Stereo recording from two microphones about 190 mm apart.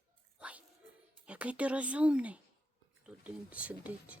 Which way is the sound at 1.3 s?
5° right (ahead or behind).